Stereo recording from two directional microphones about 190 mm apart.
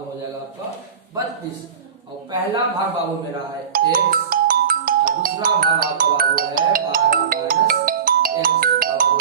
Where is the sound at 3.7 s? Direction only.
50° right (ahead or behind).